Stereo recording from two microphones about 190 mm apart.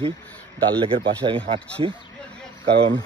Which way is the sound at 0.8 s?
30° right (ahead or behind).